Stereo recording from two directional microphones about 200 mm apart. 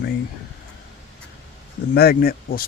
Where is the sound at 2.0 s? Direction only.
50° left (ahead or behind).